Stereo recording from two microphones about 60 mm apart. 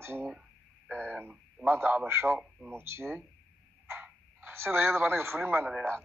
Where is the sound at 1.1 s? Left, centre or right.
Right.